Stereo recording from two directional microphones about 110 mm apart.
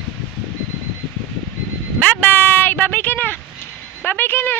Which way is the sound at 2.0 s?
15° left (ahead or behind).